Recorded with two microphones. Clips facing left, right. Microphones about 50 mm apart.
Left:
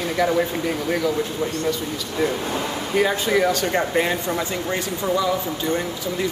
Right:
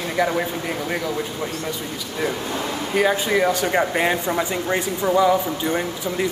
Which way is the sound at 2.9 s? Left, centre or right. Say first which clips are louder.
Even; centre.